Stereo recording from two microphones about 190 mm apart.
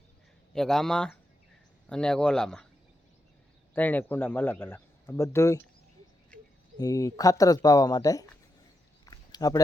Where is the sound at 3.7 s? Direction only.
10° left (ahead or behind).